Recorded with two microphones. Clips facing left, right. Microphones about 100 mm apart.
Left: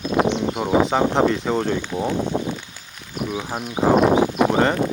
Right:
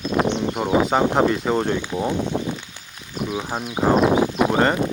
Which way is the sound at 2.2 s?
15° left (ahead or behind).